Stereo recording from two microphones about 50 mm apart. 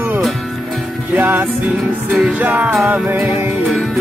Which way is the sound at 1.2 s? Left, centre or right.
Right.